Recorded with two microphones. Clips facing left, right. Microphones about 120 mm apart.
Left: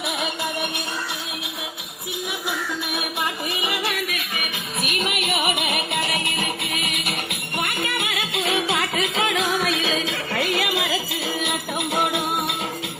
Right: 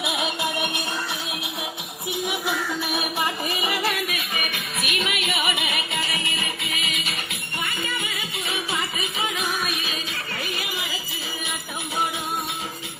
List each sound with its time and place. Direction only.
0.0 s music: 5° right (ahead or behind)
3.5 s music: centre (ahead or behind)
4.8 s music: 45° left (ahead or behind); by 11.0 s 85° left
11.9 s music: 65° left (ahead or behind)